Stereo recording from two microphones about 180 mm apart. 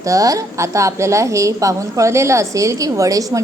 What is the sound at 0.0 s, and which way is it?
A woman's voice, 20° right (ahead or behind).